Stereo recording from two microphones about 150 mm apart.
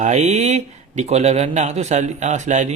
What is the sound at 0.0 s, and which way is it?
Speech, 50° right (ahead or behind).